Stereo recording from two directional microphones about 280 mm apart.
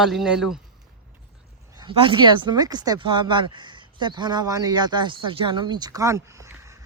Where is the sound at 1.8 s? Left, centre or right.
Centre.